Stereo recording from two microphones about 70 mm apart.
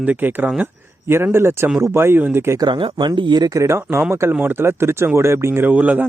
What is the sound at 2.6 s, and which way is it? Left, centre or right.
Speech, right.